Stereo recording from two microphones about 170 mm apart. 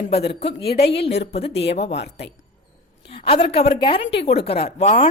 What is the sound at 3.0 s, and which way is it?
A woman's voice, 35° left (ahead or behind).